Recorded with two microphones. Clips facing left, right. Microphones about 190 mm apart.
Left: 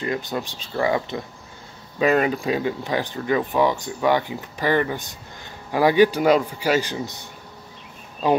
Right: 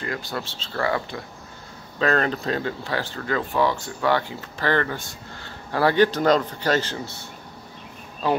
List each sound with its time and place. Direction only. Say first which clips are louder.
0.0 s speech: left 4 dB; 20° left (ahead or behind)